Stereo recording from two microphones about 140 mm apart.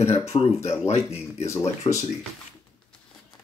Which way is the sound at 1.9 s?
35° left (ahead or behind).